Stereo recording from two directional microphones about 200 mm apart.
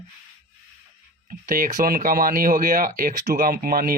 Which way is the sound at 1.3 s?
45° right (ahead or behind).